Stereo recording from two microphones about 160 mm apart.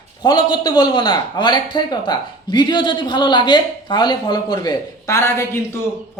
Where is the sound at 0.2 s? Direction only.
25° left (ahead or behind).